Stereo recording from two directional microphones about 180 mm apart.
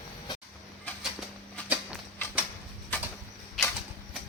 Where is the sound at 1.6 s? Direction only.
10° left (ahead or behind).